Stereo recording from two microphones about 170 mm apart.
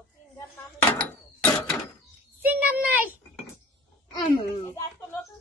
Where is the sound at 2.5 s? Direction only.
10° right (ahead or behind).